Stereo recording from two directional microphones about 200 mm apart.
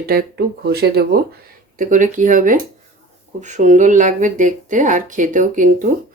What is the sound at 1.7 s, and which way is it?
Speech, 40° right (ahead or behind).